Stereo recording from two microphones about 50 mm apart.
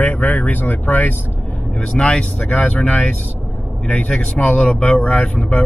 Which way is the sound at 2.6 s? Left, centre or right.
Left.